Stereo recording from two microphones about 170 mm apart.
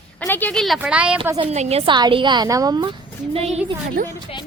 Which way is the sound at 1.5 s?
40° right (ahead or behind).